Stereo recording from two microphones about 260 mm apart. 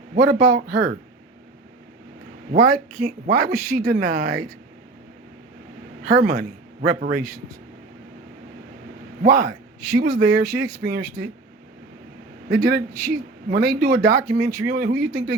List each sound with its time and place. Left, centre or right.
0.2 s speech: right
2.5 s speech: right
6.1 s speech: right
9.2 s speech: right
12.5 s speech: right